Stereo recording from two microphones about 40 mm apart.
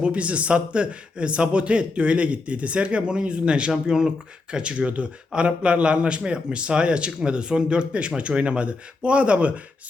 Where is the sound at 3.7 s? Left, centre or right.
Centre.